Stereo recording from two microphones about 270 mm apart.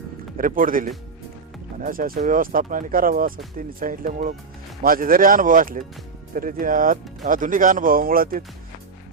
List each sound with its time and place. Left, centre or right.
0.3 s speech: right